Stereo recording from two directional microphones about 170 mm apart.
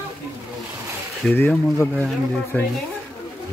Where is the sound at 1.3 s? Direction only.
10° left (ahead or behind).